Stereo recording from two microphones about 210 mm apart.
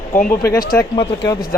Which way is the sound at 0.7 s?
20° left (ahead or behind).